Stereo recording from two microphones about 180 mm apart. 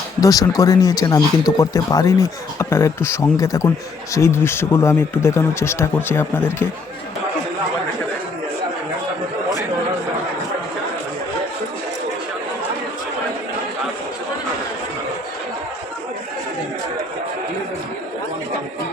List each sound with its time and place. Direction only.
0.2 s speech: 20° left (ahead or behind)